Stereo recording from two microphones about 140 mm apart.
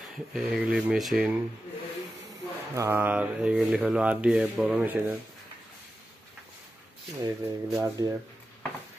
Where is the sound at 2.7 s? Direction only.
15° right (ahead or behind).